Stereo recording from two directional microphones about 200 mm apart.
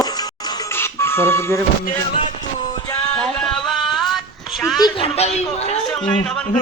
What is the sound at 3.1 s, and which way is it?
Music, 5° left (ahead or behind).